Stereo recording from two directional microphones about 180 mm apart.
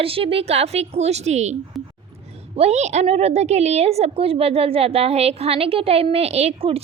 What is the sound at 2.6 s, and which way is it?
A woman's voice, 35° right (ahead or behind).